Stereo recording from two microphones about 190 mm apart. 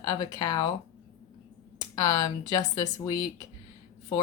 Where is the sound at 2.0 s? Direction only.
20° left (ahead or behind).